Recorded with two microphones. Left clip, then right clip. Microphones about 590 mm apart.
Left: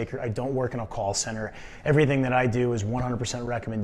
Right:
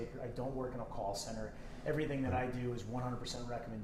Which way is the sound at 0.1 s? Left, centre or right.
Left.